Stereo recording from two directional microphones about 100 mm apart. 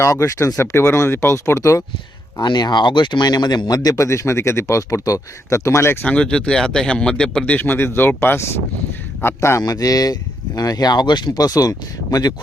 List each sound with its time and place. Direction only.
0.0 s speech: 30° left (ahead or behind)
2.4 s speech: 45° left (ahead or behind); by 6.1 s 25° left (ahead or behind)
6.1 s speech: 10° left (ahead or behind); by 12.3 s 40° left (ahead or behind)